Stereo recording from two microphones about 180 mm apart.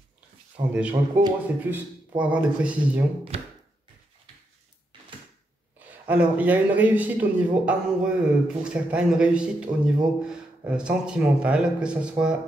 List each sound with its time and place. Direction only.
0.7 s speech: 5° right (ahead or behind)
3.3 s a sound: 35° right (ahead or behind)
6.0 s a man's voice: 10° right (ahead or behind)